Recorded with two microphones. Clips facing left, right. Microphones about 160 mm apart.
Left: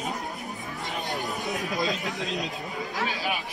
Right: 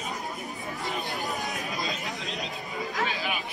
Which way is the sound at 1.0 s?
20° left (ahead or behind).